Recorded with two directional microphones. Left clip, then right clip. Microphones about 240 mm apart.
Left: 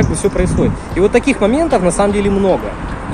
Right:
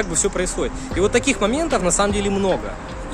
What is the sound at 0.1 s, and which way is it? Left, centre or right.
Speech, centre.